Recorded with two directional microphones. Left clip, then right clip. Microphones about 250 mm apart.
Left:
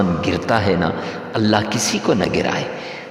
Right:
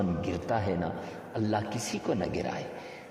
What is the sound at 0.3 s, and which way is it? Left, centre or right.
A man's voice, left.